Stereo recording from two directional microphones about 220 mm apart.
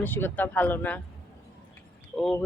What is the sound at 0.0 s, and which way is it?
Speech, 10° left (ahead or behind).